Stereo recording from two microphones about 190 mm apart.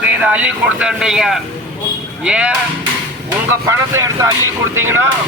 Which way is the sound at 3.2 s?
15° right (ahead or behind).